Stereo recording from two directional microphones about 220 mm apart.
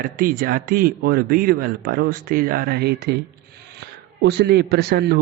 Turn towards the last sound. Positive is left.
turn(degrees=-45)  # may be behind; listen again after turning